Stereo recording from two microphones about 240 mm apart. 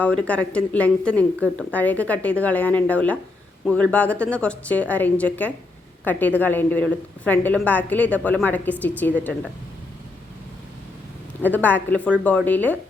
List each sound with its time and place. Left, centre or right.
0.0 s a woman's voice: centre
11.4 s a woman's voice: centre